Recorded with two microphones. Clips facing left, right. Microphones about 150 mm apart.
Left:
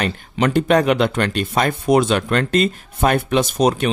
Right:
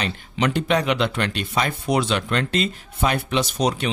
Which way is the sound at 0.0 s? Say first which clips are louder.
Left 4 dB; 50° left (ahead or behind).